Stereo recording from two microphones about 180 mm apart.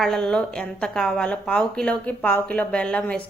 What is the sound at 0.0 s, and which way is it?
A woman's voice, centre (ahead or behind).